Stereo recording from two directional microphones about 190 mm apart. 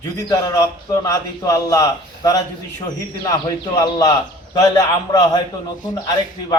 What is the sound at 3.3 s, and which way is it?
Speech, 20° left (ahead or behind).